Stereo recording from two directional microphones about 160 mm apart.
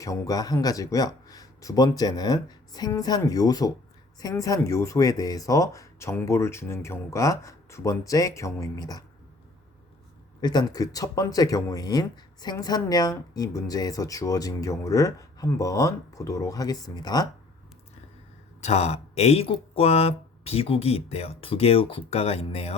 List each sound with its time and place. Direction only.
0.0 s speech: 20° left (ahead or behind)
10.4 s speech: 25° left (ahead or behind)
18.6 s speech: 45° left (ahead or behind)